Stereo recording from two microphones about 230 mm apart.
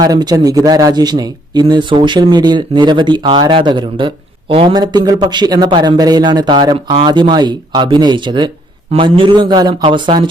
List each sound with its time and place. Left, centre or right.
0.0 s speech: centre